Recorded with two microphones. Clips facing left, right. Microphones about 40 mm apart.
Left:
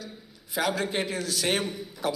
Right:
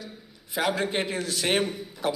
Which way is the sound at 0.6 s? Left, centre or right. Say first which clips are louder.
Right 1 dB; right.